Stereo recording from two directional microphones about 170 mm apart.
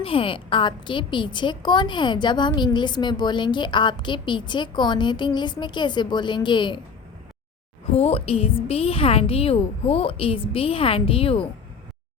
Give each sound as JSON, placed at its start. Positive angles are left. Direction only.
{"t": 0.0, "sound": "a woman's voice", "side_deg": 30}
{"t": 7.9, "sound": "a woman's voice", "side_deg": 40}